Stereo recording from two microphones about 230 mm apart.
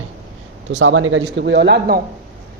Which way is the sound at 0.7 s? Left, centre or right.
Right.